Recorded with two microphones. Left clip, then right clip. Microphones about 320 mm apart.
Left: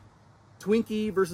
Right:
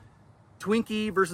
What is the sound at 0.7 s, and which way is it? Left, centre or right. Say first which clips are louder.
Speech: left 1 dB; centre.